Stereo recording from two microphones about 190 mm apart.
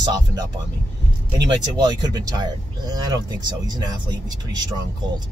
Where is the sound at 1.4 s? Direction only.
20° right (ahead or behind).